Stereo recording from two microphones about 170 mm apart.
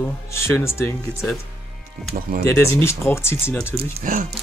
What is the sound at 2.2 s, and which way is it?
Speech, 55° right (ahead or behind).